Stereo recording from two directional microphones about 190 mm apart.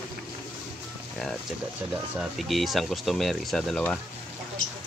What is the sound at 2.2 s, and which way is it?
Speech, centre (ahead or behind).